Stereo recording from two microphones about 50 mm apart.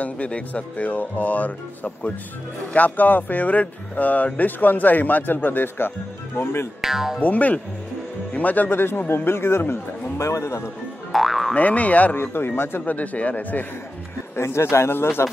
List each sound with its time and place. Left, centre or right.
0.0 s speech: left
6.8 s speech: centre
7.2 s speech: left
8.3 s music: left
8.6 s a man's voice: left
11.1 s speech: centre
11.5 s speech: left
12.2 s a man's voice: left
12.8 s speech: left
14.3 s a man's voice: left